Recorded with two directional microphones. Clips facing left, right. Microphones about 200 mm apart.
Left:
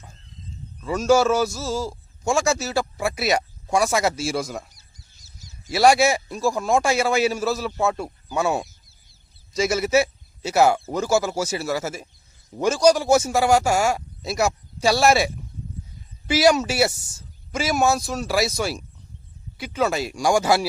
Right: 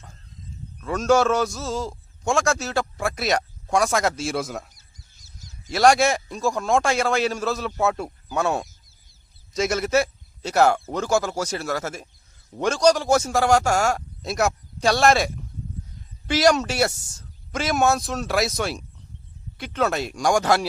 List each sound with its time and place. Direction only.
0.9 s a man's voice: centre (ahead or behind)
4.8 s goose: 50° right (ahead or behind)
5.6 s a man's voice: 5° left (ahead or behind)
16.3 s a man's voice: 5° left (ahead or behind)